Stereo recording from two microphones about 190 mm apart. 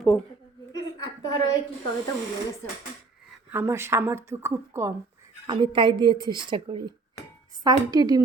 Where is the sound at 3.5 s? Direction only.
10° right (ahead or behind).